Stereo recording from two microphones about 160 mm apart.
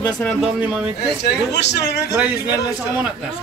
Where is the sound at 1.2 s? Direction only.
90° left.